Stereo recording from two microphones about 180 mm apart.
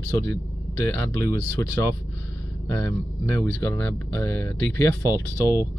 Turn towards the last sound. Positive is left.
turn(degrees=20)  # may be behind; listen again after turning